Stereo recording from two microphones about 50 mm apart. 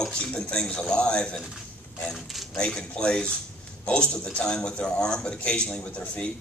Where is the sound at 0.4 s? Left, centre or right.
Centre.